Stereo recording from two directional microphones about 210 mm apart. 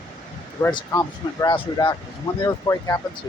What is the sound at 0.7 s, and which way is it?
Speech, 20° left (ahead or behind).